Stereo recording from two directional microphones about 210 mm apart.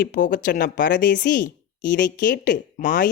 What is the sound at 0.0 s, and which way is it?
A woman's voice, 40° left (ahead or behind).